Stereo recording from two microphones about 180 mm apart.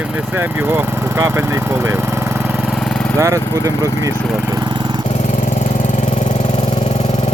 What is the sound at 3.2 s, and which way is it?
Speech, 15° right (ahead or behind).